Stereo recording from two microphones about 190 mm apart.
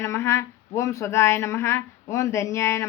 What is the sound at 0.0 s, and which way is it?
Speech, 15° left (ahead or behind).